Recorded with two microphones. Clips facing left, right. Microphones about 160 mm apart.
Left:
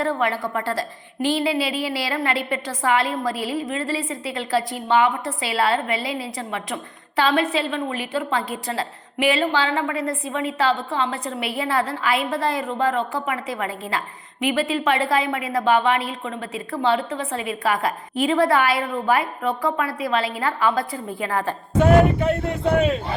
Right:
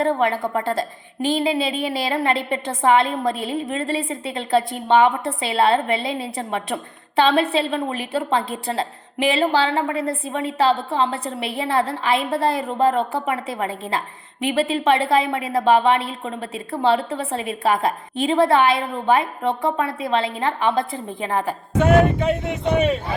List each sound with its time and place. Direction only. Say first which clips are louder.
0.0 s a woman's voice: right 3 dB; 25° right (ahead or behind)